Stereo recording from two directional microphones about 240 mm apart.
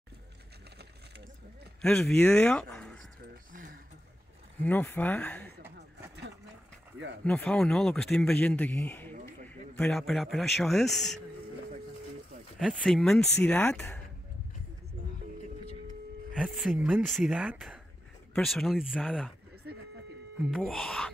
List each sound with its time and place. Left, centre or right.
1.8 s speech: centre
3.5 s a sound: right
4.6 s speech: centre
5.8 s vehicle: right
7.2 s a man's voice: centre
12.5 s a man's voice: centre
16.3 s a man's voice: centre
20.5 s a man's voice: centre